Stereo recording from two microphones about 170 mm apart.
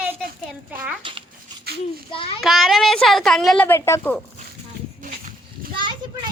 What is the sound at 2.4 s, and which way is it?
A woman's voice, centre (ahead or behind).